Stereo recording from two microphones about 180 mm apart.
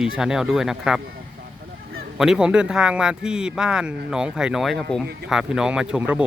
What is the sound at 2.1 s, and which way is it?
Speech, 5° right (ahead or behind).